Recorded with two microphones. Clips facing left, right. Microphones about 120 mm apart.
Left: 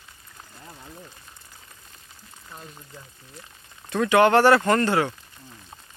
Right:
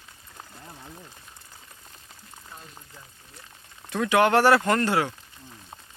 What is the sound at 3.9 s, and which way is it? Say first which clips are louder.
Speech: left 3 dB; 5° right (ahead or behind).